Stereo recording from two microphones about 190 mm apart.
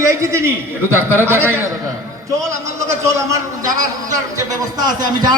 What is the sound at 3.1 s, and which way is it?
A man's voice, 15° right (ahead or behind).